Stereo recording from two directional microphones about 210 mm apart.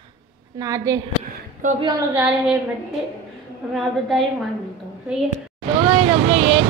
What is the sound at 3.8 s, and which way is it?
Speech, centre (ahead or behind).